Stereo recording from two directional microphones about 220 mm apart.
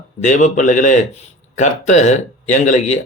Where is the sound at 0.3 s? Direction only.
35° left (ahead or behind).